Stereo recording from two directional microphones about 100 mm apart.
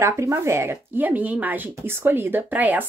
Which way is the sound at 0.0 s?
30° right (ahead or behind).